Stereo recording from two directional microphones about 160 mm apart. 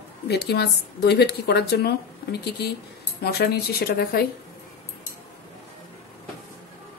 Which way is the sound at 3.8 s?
75° left (ahead or behind).